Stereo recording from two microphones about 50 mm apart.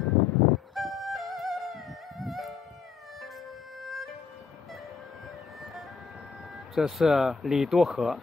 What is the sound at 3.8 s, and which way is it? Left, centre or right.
Music, centre.